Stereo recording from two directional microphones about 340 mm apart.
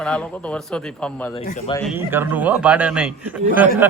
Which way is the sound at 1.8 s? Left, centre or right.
Centre.